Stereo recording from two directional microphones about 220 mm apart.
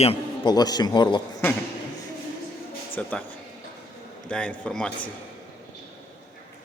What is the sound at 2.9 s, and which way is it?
Speech, 5° left (ahead or behind).